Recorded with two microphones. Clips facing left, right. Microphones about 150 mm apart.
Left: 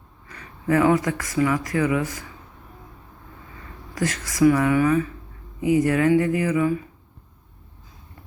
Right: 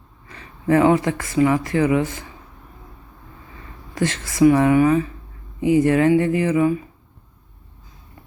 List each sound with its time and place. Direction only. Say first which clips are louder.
0.3 s speech: right 4 dB; 25° right (ahead or behind)
3.9 s speech: right 3 dB; 25° right (ahead or behind)